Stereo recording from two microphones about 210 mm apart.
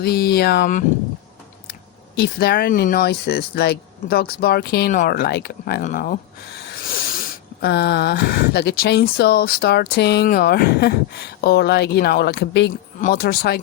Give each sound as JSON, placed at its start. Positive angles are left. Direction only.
{"t": 0.0, "sound": "speech", "side_deg": 50}
{"t": 2.1, "sound": "speech", "side_deg": 50}
{"t": 7.6, "sound": "speech", "side_deg": 50}
{"t": 13.0, "sound": "speech", "side_deg": 40}